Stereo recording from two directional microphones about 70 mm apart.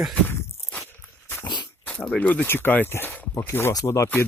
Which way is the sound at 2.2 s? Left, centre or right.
Left.